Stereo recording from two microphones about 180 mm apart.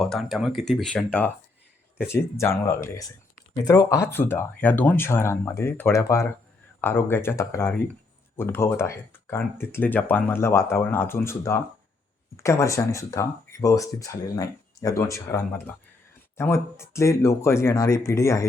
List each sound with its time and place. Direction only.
0.0 s speech: centre (ahead or behind); by 18.4 s 15° left (ahead or behind)